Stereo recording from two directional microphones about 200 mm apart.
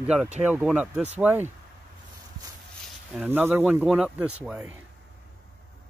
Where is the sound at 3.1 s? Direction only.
10° right (ahead or behind).